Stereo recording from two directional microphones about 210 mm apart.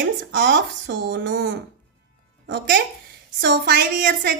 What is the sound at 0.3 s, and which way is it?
Speech, 60° right (ahead or behind).